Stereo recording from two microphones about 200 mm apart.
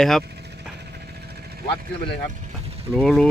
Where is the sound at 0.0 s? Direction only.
Centre (ahead or behind).